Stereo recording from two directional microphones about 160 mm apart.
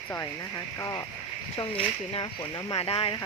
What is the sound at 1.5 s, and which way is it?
Speech, 30° left (ahead or behind).